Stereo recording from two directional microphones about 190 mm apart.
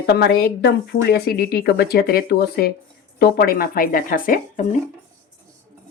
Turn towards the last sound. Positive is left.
turn(degrees=45)  # may be behind; listen again after turning